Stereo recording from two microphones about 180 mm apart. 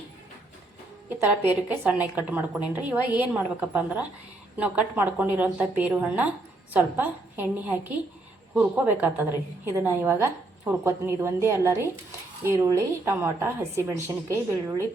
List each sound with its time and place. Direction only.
1.2 s a woman's voice: 10° right (ahead or behind)